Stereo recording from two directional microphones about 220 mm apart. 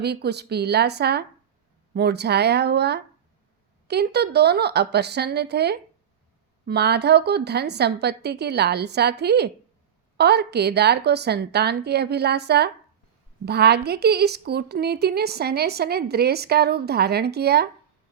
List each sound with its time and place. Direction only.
0.0 s a woman's voice: 45° right (ahead or behind)